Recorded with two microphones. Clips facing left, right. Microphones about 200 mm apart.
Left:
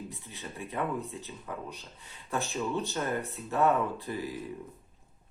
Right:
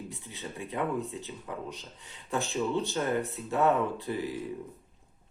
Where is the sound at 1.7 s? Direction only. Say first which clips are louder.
Right 2 dB; 15° right (ahead or behind).